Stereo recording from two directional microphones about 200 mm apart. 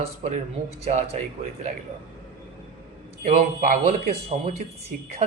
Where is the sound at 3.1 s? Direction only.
35° right (ahead or behind).